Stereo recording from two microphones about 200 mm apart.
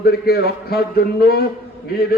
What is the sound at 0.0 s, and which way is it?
A man's voice, 50° left (ahead or behind).